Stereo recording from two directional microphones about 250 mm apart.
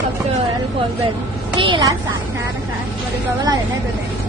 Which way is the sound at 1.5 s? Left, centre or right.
Centre.